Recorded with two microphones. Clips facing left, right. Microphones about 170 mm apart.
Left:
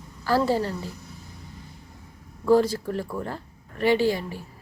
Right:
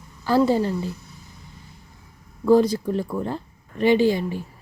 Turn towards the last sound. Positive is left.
turn(degrees=-20)  # may be behind; listen again after turning